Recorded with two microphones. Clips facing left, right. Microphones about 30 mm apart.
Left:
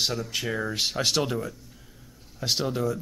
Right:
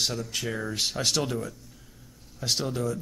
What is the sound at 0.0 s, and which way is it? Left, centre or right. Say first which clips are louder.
Speech: left 2 dB; centre.